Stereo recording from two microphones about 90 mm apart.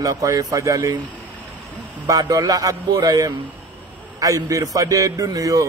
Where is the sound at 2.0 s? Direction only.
40° right (ahead or behind).